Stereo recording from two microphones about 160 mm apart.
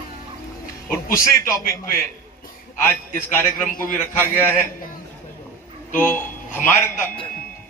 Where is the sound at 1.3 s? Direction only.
20° left (ahead or behind).